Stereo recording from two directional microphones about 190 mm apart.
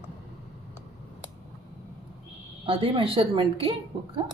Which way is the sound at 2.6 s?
30° right (ahead or behind).